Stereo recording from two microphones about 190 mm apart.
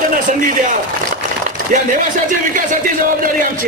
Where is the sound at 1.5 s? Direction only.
40° right (ahead or behind).